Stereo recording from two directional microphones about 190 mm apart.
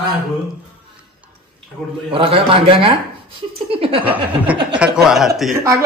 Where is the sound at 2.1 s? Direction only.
30° right (ahead or behind).